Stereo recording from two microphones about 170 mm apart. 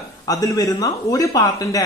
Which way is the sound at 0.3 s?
20° left (ahead or behind).